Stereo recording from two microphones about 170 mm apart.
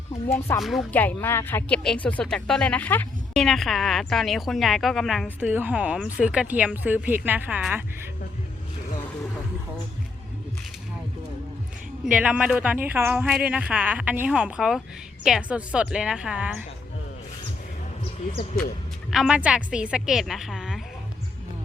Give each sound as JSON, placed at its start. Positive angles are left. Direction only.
{"t": 0.3, "sound": "speech", "side_deg": 15}
{"t": 0.6, "sound": "speech", "side_deg": 0}
{"t": 12.1, "sound": "a woman's voice", "side_deg": -5}
{"t": 19.1, "sound": "speech", "side_deg": -5}